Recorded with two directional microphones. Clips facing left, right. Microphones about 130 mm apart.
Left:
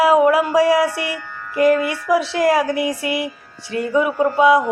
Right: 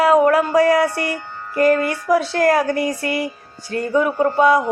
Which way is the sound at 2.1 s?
5° left (ahead or behind).